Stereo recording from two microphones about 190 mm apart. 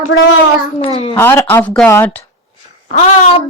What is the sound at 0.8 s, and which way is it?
Speech, 30° left (ahead or behind).